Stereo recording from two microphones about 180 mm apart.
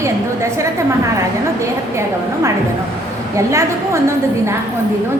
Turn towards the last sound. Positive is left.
turn(degrees=-15)  # may be behind; listen again after turning